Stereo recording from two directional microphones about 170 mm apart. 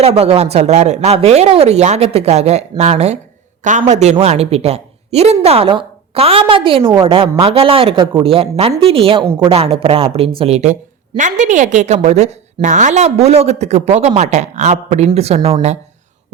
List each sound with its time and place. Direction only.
0.0 s a woman's voice: 35° right (ahead or behind)